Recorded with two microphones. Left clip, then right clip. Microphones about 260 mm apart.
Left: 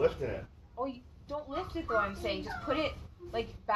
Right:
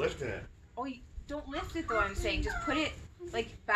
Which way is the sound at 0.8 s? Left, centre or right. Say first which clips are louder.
Left 2 dB; right.